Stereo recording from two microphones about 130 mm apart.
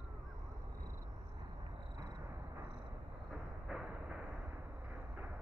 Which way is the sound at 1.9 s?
30° right (ahead or behind).